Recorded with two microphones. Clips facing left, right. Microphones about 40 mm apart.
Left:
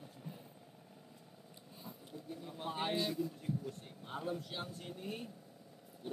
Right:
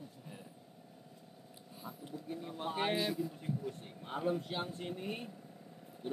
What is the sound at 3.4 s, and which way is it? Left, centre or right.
Speech, centre.